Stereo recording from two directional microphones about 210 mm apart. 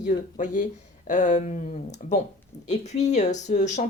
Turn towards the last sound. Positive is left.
turn(degrees=35)  # may be behind; listen again after turning